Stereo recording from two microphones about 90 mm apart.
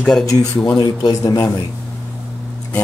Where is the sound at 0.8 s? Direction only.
50° left (ahead or behind).